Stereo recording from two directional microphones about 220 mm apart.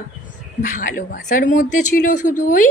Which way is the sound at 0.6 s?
35° left (ahead or behind).